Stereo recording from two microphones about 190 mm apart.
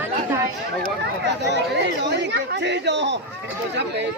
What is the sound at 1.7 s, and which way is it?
Speech, 65° right (ahead or behind).